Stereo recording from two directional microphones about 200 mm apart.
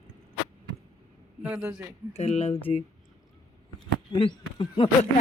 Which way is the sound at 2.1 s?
30° left (ahead or behind).